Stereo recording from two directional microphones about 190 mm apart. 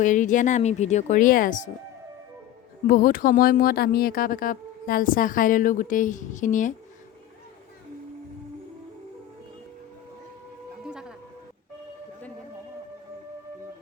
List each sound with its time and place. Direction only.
0.0 s speech: 40° left (ahead or behind)
2.8 s speech: 45° left (ahead or behind)